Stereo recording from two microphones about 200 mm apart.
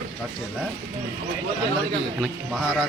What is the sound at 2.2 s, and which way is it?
Speech, centre (ahead or behind).